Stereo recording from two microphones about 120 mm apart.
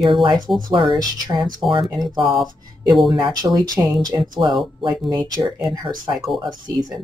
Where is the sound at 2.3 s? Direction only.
40° right (ahead or behind).